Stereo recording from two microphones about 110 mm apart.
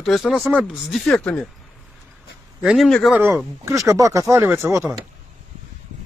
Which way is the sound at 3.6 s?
30° right (ahead or behind).